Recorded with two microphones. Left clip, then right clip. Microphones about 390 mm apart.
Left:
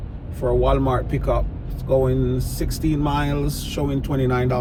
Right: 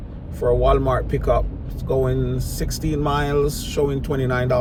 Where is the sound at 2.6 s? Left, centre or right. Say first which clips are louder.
Even; centre.